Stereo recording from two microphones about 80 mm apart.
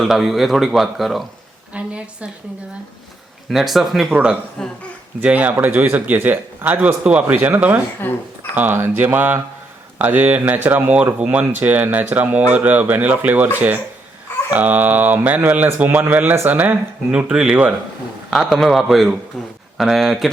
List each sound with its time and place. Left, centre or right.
0.0 s speech: centre
1.7 s a woman's voice: centre
3.5 s speech: centre
4.1 s speech: centre
4.6 s speech: centre
5.2 s speech: centre
8.0 s speech: left
8.5 s speech: right
14.5 s speech: right
18.3 s speech: centre